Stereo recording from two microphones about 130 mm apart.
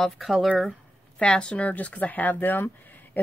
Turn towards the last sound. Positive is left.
turn(degrees=15)  # may be behind; listen again after turning